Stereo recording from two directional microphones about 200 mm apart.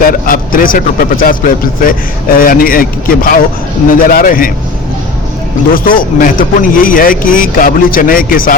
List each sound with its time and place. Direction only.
0.1 s speech: 45° left (ahead or behind)
5.7 s speech: 45° left (ahead or behind)